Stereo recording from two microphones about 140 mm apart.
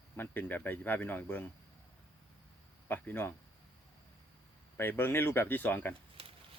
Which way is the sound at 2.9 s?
15° left (ahead or behind).